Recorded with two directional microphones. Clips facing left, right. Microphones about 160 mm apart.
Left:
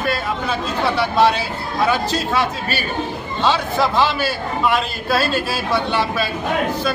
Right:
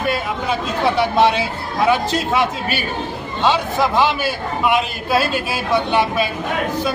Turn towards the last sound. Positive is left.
turn(degrees=-15)  # may be behind; listen again after turning